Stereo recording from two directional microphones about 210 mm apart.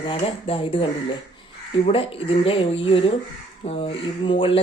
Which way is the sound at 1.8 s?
25° left (ahead or behind).